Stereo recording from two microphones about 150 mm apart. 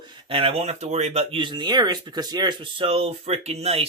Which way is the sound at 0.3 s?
40° right (ahead or behind).